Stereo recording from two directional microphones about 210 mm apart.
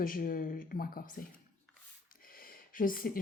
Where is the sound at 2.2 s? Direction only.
45° left (ahead or behind).